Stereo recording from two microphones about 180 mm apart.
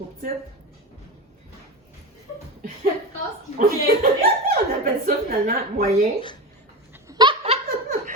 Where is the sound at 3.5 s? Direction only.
45° right (ahead or behind).